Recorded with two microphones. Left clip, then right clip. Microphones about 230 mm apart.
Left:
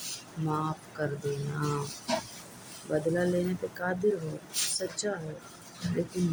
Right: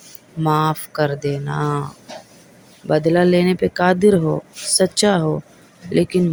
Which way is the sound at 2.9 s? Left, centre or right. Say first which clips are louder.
Right 13 dB; right.